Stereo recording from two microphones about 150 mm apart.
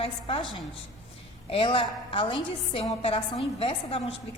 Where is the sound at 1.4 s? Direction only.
35° left (ahead or behind).